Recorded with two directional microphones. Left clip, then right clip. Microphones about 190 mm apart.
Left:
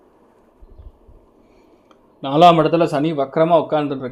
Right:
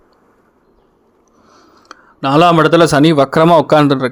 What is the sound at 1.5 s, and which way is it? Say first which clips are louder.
Speech: right 15 dB; 25° right (ahead or behind).